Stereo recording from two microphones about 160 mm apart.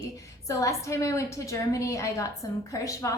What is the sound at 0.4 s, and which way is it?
A woman's voice, 20° left (ahead or behind).